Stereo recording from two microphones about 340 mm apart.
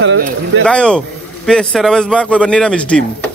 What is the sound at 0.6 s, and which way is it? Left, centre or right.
Speech, centre.